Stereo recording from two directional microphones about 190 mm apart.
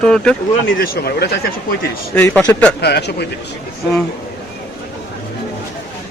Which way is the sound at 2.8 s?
60° left (ahead or behind).